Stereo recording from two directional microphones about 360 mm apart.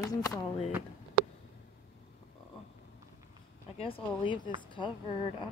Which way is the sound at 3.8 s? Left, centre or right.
Centre.